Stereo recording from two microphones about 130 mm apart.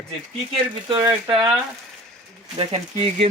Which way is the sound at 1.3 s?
40° right (ahead or behind).